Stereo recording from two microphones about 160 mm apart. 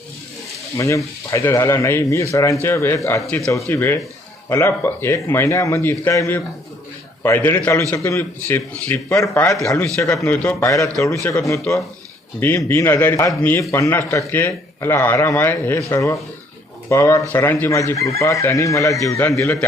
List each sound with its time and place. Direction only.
0.8 s speech: 20° left (ahead or behind)
10.6 s speech: 20° left (ahead or behind)